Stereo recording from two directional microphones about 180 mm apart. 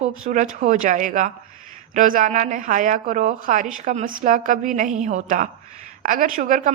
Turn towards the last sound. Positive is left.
turn(degrees=-45)  # may be behind; listen again after turning